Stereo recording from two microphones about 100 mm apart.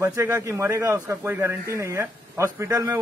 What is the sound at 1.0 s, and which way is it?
Speech, 20° right (ahead or behind).